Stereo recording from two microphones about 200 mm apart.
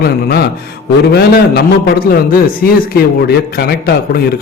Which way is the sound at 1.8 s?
50° left (ahead or behind).